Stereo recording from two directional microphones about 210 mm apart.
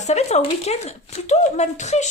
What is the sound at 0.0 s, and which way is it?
Speech, 30° left (ahead or behind).